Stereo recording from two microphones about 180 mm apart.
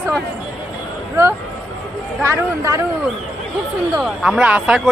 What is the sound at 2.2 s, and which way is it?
Speech, 15° right (ahead or behind).